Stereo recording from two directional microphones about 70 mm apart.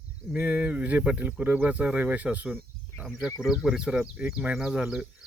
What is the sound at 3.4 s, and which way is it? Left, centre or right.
Speech, centre.